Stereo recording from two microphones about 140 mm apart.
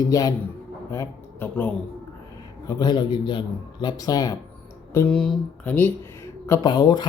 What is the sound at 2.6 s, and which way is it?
A man's voice, 30° left (ahead or behind).